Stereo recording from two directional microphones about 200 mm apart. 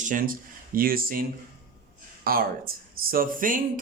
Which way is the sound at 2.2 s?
45° right (ahead or behind).